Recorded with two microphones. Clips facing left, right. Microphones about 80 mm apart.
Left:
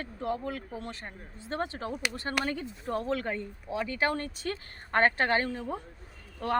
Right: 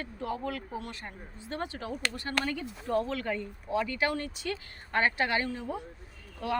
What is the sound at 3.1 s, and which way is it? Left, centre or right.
Speech, left.